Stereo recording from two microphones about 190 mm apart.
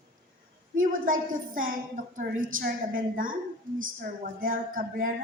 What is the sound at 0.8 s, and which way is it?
A woman's voice, 45° right (ahead or behind).